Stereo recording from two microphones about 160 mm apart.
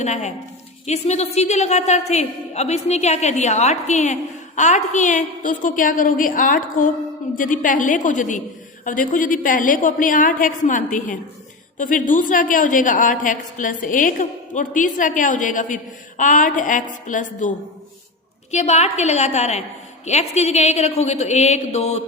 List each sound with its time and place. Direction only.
0.0 s a woman's voice: 45° left (ahead or behind)
18.5 s a woman's voice: 45° left (ahead or behind)